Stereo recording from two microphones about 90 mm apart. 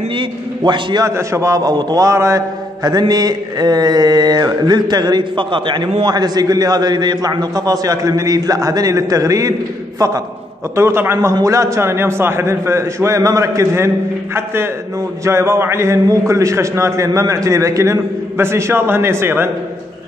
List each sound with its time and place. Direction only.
0.1 s a man's voice: 65° right (ahead or behind)
1.0 s a man's voice: 35° right (ahead or behind); by 2.0 s 50° right (ahead or behind)
2.0 s mantra: 35° right (ahead or behind)
10.8 s a man's voice: 30° right (ahead or behind)